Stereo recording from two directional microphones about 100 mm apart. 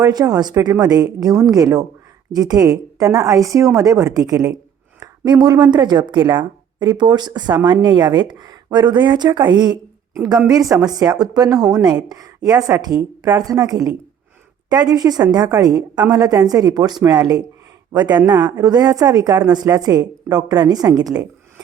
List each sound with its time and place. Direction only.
0.0 s a woman's voice: 40° right (ahead or behind)
10.5 s a woman's voice: 35° right (ahead or behind)